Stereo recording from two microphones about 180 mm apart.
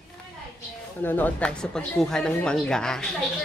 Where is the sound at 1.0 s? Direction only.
10° left (ahead or behind).